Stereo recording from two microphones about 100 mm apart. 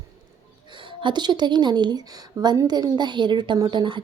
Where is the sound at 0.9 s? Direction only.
50° right (ahead or behind).